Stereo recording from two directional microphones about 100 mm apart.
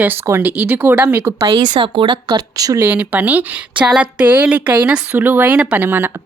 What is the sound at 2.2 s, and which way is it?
Speech, 40° right (ahead or behind).